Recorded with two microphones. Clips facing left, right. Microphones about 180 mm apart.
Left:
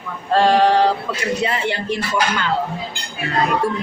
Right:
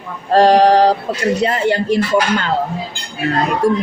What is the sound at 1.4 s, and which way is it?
Speech, 40° right (ahead or behind).